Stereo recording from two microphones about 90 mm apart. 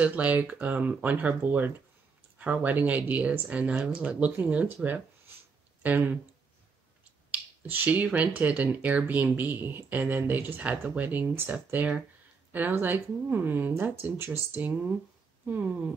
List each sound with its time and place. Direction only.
0.0 s speech: 15° right (ahead or behind)
5.8 s speech: 20° right (ahead or behind)
7.2 s speech: 20° right (ahead or behind)